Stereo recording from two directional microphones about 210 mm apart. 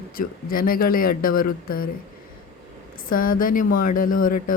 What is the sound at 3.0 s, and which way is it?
Speech, 40° left (ahead or behind).